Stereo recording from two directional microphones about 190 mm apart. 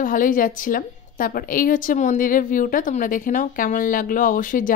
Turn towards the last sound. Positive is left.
turn(degrees=45)  # may be behind; listen again after turning